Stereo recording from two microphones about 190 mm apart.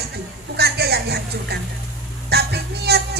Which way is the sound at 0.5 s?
60° right (ahead or behind).